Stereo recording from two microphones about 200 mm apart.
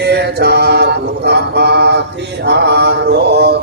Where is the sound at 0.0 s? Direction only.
55° right (ahead or behind).